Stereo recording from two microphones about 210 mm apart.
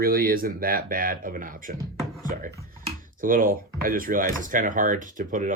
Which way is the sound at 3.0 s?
40° right (ahead or behind).